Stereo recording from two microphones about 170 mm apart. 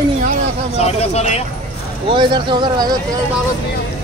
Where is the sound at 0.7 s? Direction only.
40° left (ahead or behind).